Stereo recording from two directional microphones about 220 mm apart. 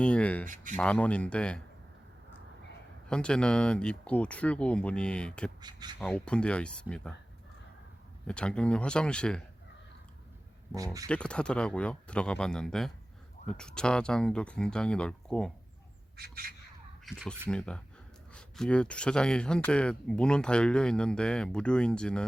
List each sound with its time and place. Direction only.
0.0 s speech: 5° left (ahead or behind)
0.4 s speech: 35° right (ahead or behind)
0.8 s speech: 5° left (ahead or behind)
3.1 s speech: 5° left (ahead or behind)
5.5 s speech: 20° right (ahead or behind)
6.0 s speech: 5° left (ahead or behind)
8.3 s speech: 5° left (ahead or behind)
11.1 s speech: 5° left (ahead or behind)
16.1 s speech: 45° right (ahead or behind)
17.1 s speech: centre (ahead or behind)